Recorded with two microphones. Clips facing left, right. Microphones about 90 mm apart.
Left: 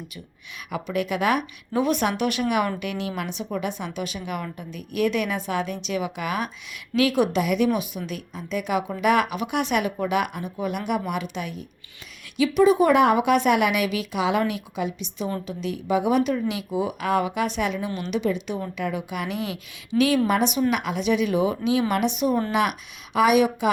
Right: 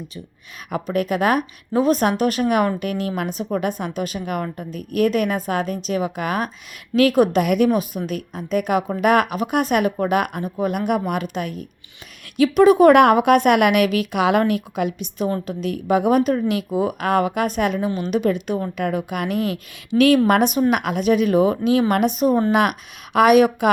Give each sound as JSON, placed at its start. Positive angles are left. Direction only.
{"t": 0.7, "sound": "a woman's voice", "side_deg": -45}
{"t": 23.1, "sound": "speech", "side_deg": -55}